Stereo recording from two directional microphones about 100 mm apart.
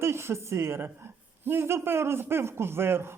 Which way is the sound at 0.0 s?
25° right (ahead or behind).